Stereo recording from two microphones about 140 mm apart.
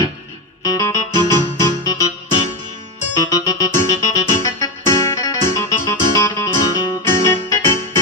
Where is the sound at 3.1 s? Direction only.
25° left (ahead or behind).